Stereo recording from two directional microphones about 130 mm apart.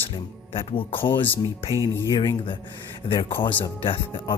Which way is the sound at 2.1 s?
35° left (ahead or behind).